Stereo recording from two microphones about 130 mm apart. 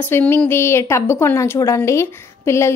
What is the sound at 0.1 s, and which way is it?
A woman's voice, 15° left (ahead or behind).